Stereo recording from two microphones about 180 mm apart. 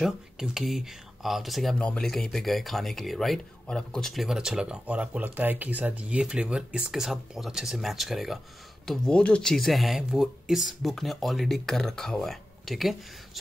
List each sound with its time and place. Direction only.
0.0 s speech: centre (ahead or behind)